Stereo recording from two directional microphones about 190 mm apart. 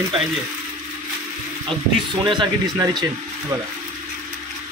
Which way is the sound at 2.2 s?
25° right (ahead or behind).